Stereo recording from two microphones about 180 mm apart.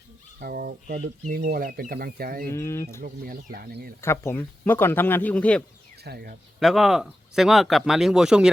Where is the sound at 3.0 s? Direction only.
55° right (ahead or behind).